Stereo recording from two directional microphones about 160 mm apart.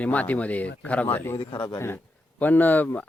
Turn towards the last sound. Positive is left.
turn(degrees=10)  # may be behind; listen again after turning